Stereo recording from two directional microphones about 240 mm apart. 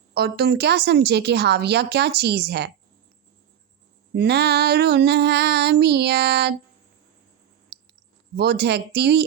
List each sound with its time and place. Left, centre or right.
0.1 s a woman's voice: right
4.1 s a woman's voice: right
7.7 s clicking: right
8.4 s a woman's voice: right